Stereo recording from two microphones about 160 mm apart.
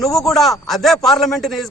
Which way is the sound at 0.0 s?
Centre (ahead or behind).